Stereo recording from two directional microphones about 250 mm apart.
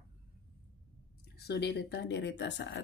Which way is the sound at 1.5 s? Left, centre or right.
Left.